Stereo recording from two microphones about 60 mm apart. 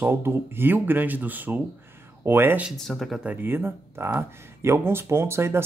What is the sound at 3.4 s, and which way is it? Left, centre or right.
Speech, right.